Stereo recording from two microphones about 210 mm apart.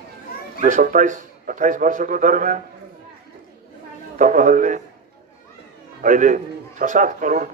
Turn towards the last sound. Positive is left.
turn(degrees=-40)  # may be behind; listen again after turning